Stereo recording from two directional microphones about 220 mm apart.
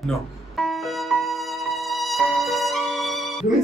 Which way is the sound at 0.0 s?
Centre (ahead or behind).